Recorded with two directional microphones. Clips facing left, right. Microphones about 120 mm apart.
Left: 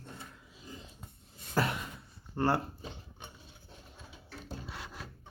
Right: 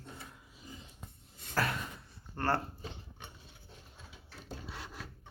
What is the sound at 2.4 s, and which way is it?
Speech, 10° left (ahead or behind).